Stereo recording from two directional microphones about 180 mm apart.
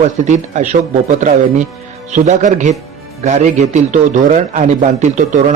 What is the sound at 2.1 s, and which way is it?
A man's voice, 40° right (ahead or behind).